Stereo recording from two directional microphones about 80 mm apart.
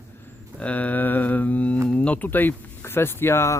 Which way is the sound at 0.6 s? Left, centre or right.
Centre.